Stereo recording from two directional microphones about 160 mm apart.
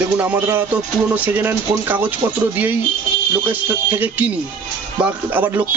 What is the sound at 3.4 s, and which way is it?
Speech, 10° right (ahead or behind).